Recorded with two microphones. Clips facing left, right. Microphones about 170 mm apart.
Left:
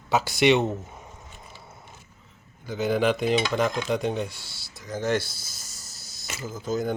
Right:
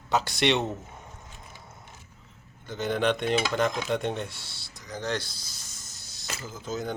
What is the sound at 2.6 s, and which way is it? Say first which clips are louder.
Dishes: left 3 dB; 5° left (ahead or behind).